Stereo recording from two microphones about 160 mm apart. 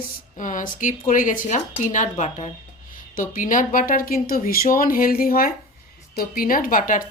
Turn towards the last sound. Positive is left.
turn(degrees=60)  # may be behind; listen again after turning